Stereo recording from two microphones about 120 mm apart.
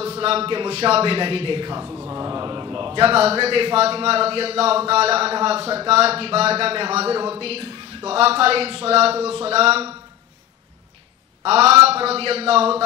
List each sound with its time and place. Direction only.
0.0 s a man's voice: 55° right (ahead or behind)
1.9 s speech: 20° right (ahead or behind)
2.2 s a man's voice: 35° right (ahead or behind); by 9.9 s 55° right (ahead or behind)
11.4 s a man's voice: 60° right (ahead or behind)